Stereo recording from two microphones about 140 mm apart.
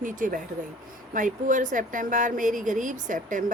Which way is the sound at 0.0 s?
70° right (ahead or behind).